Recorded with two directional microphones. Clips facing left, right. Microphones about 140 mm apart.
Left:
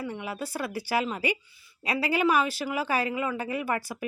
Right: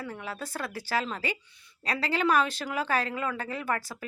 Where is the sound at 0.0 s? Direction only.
10° left (ahead or behind).